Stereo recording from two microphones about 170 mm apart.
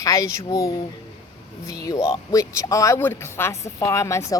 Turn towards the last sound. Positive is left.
turn(degrees=15)  # may be behind; listen again after turning